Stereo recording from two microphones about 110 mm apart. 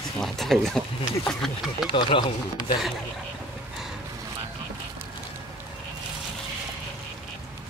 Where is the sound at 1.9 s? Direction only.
50° left (ahead or behind).